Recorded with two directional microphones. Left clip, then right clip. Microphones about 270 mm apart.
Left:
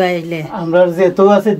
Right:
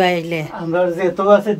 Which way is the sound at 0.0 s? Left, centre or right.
Centre.